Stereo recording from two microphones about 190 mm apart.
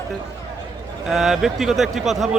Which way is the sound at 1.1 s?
Centre (ahead or behind).